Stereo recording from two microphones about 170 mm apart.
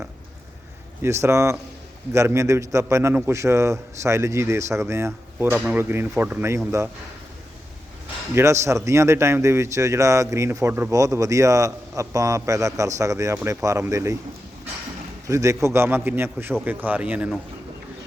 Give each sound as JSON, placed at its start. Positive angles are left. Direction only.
{"t": 1.0, "sound": "speech", "side_deg": -15}
{"t": 8.4, "sound": "speech", "side_deg": -15}
{"t": 15.3, "sound": "speech", "side_deg": -20}